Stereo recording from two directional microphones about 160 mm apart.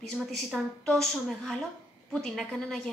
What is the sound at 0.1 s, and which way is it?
A woman's voice, 5° left (ahead or behind).